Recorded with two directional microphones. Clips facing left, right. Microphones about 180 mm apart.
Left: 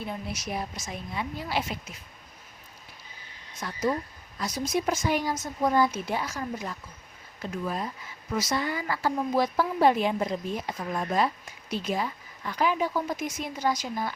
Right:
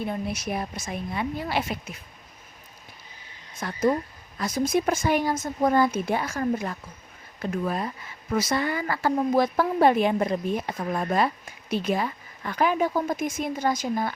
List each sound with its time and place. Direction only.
0.1 s a woman's voice: 55° right (ahead or behind)
3.6 s a woman's voice: 50° right (ahead or behind)